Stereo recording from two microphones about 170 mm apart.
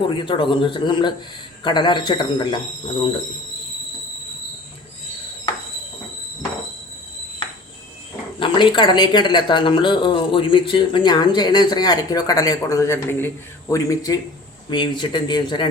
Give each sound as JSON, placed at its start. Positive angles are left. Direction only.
{"t": 0.1, "sound": "speech", "side_deg": 30}
{"t": 8.4, "sound": "speech", "side_deg": 30}